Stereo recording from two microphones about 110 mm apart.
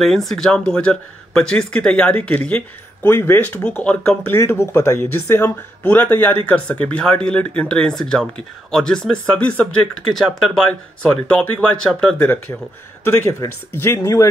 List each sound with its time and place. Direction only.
0.0 s speech: 5° left (ahead or behind)
13.0 s speech: 25° left (ahead or behind)